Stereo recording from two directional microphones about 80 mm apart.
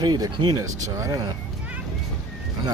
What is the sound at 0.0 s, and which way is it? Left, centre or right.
Speech, right.